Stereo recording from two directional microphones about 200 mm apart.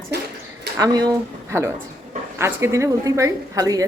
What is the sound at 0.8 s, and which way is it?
A woman's voice, 20° right (ahead or behind).